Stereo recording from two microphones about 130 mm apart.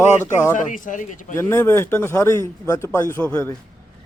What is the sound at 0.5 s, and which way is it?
Speech, 85° left.